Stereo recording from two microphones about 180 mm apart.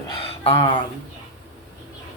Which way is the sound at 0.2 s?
30° left (ahead or behind).